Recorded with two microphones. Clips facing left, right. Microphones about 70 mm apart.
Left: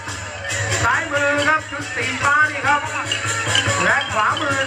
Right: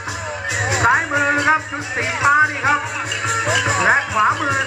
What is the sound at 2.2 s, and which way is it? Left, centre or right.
Speech, centre.